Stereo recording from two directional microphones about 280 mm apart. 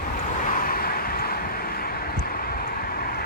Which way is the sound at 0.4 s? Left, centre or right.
Left.